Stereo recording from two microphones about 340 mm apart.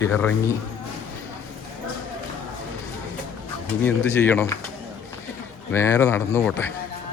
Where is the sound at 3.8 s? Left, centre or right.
Centre.